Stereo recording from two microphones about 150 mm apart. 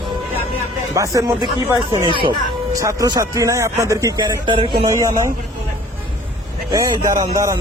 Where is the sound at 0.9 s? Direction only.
20° right (ahead or behind).